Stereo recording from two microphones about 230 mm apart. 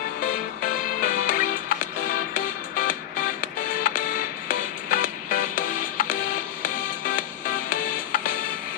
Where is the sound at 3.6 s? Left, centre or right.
Left.